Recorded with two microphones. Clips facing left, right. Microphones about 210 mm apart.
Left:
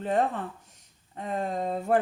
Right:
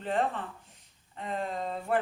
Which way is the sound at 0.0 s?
45° left (ahead or behind).